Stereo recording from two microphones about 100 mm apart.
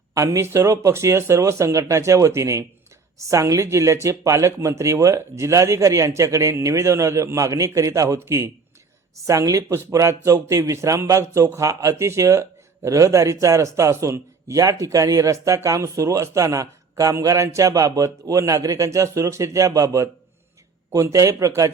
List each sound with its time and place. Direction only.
0.1 s speech: 30° right (ahead or behind)